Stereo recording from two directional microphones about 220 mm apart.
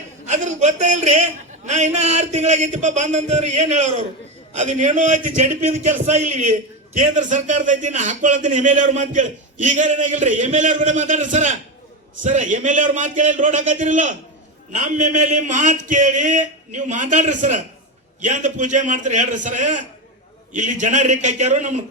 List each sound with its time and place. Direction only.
0.3 s a man's voice: 30° right (ahead or behind)